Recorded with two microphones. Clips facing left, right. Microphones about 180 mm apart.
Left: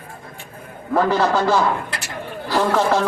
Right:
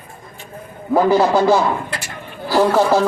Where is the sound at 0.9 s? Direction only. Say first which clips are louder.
Right 4 dB; 10° right (ahead or behind).